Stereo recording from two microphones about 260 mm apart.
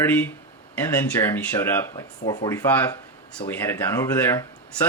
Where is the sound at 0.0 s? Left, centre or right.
Centre.